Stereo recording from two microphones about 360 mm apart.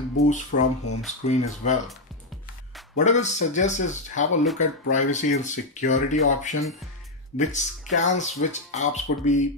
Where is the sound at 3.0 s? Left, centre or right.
Centre.